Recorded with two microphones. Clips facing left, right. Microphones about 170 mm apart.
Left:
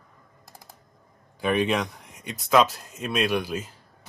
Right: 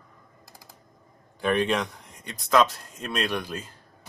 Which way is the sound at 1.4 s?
5° left (ahead or behind).